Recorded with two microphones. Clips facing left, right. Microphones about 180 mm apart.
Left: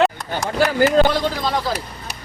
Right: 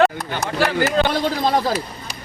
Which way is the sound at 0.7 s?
40° left (ahead or behind).